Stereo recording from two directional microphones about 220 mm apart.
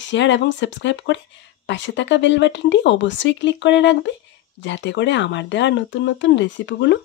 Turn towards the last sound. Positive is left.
turn(degrees=55)  # may be behind; listen again after turning